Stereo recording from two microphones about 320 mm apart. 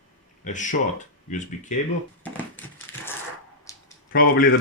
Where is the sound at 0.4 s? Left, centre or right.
Left.